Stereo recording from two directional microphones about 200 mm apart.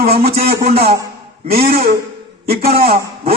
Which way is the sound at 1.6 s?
30° right (ahead or behind).